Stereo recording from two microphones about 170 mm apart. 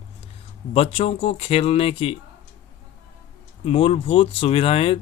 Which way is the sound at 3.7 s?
35° left (ahead or behind).